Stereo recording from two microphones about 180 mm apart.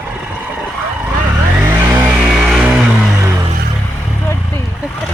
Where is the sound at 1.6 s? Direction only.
5° right (ahead or behind).